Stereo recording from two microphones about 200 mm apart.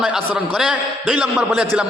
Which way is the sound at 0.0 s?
5° right (ahead or behind).